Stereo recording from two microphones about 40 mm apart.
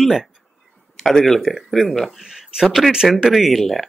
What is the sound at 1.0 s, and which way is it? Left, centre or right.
Speech, centre.